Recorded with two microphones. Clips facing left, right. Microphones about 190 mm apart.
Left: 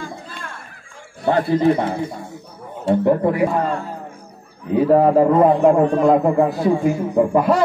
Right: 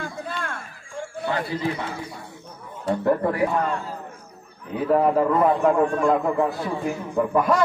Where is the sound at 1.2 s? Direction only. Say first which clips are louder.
Left 10 dB; 55° left (ahead or behind).